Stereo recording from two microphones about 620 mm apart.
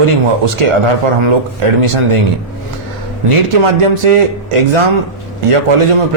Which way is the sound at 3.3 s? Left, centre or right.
Right.